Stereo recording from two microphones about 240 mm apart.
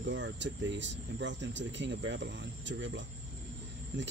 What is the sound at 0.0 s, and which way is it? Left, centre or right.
Speech, right.